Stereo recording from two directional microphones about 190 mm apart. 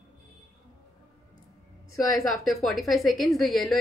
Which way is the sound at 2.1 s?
Centre (ahead or behind).